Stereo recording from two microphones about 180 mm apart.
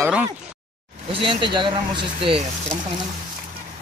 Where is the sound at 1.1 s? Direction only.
30° right (ahead or behind).